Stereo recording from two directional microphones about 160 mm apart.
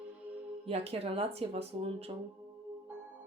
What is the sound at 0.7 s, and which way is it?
Speech, 40° right (ahead or behind).